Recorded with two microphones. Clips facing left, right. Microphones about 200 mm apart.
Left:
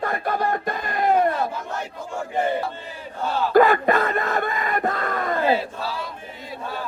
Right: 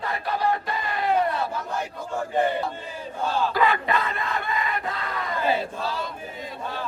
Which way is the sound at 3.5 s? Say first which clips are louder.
Left 12 dB; 50° left (ahead or behind).